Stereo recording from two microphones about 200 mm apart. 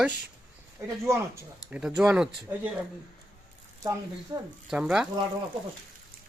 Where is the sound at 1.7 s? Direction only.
5° right (ahead or behind).